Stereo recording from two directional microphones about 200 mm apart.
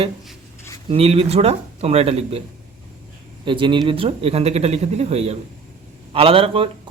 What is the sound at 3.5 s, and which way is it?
A man's voice, 25° right (ahead or behind).